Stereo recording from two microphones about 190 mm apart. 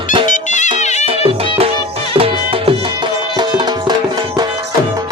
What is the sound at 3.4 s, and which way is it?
Music, 25° right (ahead or behind).